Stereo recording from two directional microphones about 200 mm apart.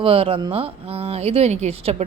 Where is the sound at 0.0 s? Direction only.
25° right (ahead or behind).